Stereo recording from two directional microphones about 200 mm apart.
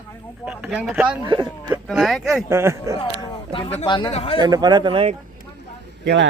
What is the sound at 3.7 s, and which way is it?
Speech, 25° left (ahead or behind).